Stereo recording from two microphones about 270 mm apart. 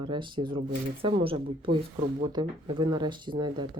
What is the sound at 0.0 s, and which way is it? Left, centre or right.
Speech, centre.